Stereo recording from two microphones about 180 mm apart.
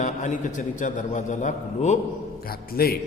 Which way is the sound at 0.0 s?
45° left (ahead or behind).